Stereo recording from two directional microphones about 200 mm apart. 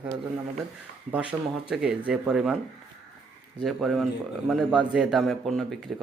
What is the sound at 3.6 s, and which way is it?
Speech, centre (ahead or behind).